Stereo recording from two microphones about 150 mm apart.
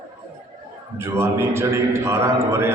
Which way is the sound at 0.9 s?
15° right (ahead or behind).